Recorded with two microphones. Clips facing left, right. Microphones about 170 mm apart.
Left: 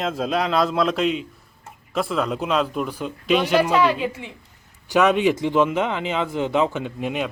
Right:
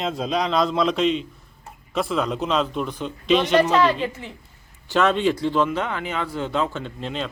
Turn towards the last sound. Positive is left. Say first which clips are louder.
# left 4 dB
turn(degrees=15)  # may be behind; listen again after turning